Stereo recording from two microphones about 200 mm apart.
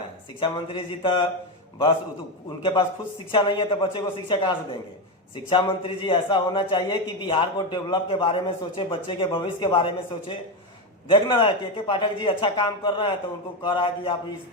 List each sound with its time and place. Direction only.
0.3 s a man's voice: 25° left (ahead or behind)
3.3 s a man's voice: 25° left (ahead or behind)